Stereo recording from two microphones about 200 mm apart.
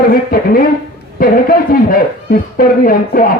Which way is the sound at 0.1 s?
50° left (ahead or behind).